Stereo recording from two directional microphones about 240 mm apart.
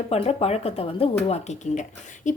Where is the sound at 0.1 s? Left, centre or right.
Left.